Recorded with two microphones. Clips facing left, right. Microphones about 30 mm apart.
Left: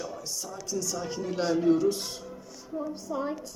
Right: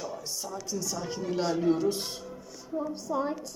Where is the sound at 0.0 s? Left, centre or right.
Centre.